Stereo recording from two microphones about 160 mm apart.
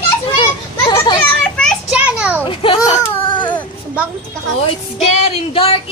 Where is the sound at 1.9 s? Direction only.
10° right (ahead or behind).